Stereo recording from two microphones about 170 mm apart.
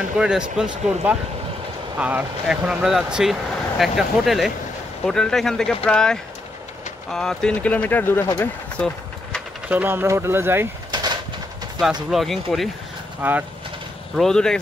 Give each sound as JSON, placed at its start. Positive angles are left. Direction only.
{"t": 0.2, "sound": "speech", "side_deg": -5}
{"t": 9.7, "sound": "speech", "side_deg": -10}
{"t": 10.9, "sound": "a sound", "side_deg": -25}
{"t": 12.1, "sound": "speech", "side_deg": 0}
{"t": 13.2, "sound": "speech", "side_deg": -10}
{"t": 14.1, "sound": "speech", "side_deg": 5}